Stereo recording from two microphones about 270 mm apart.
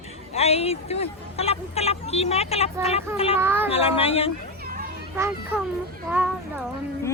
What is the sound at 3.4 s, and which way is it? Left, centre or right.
Speech, centre.